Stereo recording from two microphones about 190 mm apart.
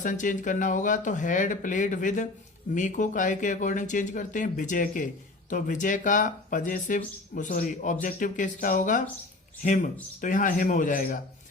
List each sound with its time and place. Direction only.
0.0 s speech: 40° left (ahead or behind)